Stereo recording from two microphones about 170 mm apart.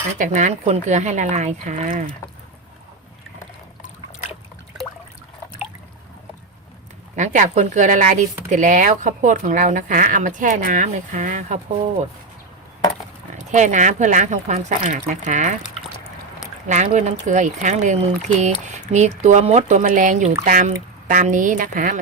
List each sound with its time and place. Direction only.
0.2 s speech: 45° right (ahead or behind)
7.2 s speech: 45° right (ahead or behind)
13.5 s speech: 45° right (ahead or behind)
16.6 s speech: 45° right (ahead or behind)